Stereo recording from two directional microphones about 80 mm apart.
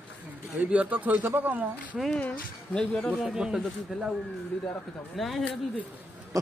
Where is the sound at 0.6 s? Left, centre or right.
Centre.